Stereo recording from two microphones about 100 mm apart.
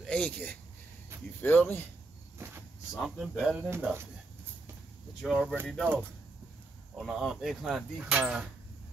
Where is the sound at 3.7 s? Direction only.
25° right (ahead or behind).